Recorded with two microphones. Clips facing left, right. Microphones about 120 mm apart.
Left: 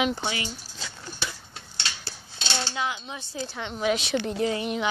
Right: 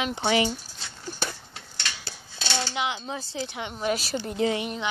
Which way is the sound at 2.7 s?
20° right (ahead or behind).